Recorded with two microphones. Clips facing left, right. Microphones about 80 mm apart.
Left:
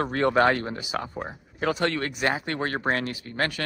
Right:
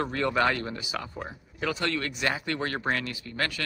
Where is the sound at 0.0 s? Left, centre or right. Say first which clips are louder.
Left 4 dB; left.